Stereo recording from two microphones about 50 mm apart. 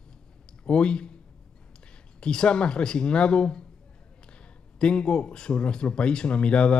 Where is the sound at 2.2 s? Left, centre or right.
Centre.